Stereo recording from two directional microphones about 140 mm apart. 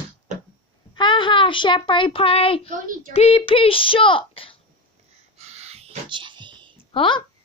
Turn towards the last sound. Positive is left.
turn(degrees=35)  # may be behind; listen again after turning